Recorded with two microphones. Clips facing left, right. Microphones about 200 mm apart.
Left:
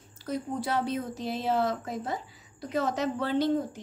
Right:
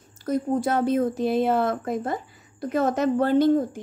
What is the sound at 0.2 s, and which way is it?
Speech, 50° right (ahead or behind).